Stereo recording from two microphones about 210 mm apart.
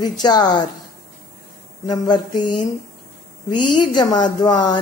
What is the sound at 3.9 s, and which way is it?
Speech, 20° left (ahead or behind).